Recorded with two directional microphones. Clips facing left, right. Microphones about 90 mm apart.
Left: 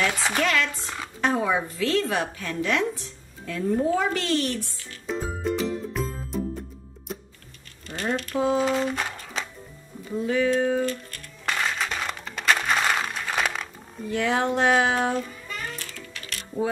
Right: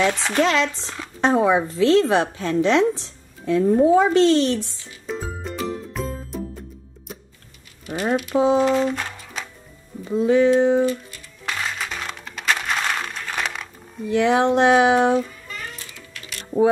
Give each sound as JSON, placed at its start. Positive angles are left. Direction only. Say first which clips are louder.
{"t": 0.1, "sound": "speech", "louder": "right 1 dB", "side_deg": 5}
{"t": 0.4, "sound": "a woman's voice", "louder": "right 6 dB", "side_deg": -25}
{"t": 5.0, "sound": "music", "louder": "left 2 dB", "side_deg": 0}
{"t": 7.8, "sound": "speech", "louder": "right 6 dB", "side_deg": -10}
{"t": 8.5, "sound": "music", "louder": "right 5 dB", "side_deg": 0}
{"t": 10.1, "sound": "a woman's voice", "louder": "right 7 dB", "side_deg": -25}
{"t": 10.9, "sound": "music", "louder": "right 5 dB", "side_deg": -5}
{"t": 14.1, "sound": "a woman's voice", "louder": "right 7 dB", "side_deg": -20}
{"t": 16.1, "sound": "mechanisms", "louder": "even", "side_deg": -5}